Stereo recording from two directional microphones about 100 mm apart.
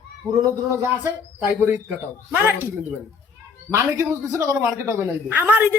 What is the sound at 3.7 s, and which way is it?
Speech, 25° right (ahead or behind).